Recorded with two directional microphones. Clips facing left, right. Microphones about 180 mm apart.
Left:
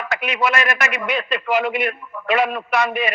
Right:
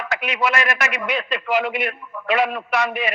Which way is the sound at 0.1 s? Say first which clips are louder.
Left 1 dB; 50° left (ahead or behind).